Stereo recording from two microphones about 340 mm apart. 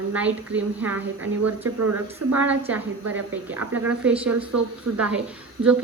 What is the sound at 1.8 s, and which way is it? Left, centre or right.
Speech, right.